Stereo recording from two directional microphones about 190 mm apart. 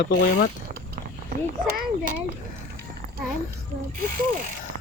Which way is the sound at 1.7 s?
50° right (ahead or behind).